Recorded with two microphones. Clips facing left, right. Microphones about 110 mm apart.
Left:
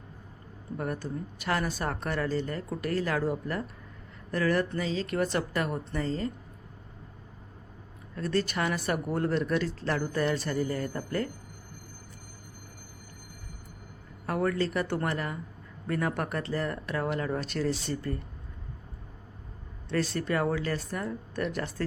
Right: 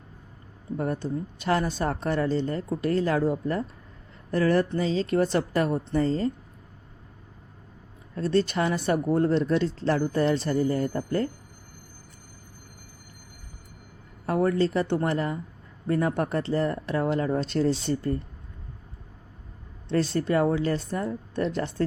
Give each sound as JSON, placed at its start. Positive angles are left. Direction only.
{"t": 0.8, "sound": "a woman's voice", "side_deg": -30}
{"t": 8.1, "sound": "speech", "side_deg": -30}
{"t": 14.3, "sound": "speech", "side_deg": -25}
{"t": 19.9, "sound": "speech", "side_deg": -30}